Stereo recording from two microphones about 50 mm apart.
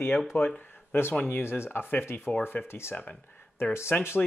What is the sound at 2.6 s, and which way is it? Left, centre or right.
Speech, left.